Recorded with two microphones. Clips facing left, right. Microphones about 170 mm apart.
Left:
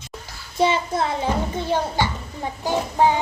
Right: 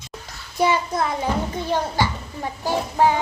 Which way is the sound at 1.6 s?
15° right (ahead or behind).